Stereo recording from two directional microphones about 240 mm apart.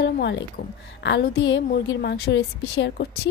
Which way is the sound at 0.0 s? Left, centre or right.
Left.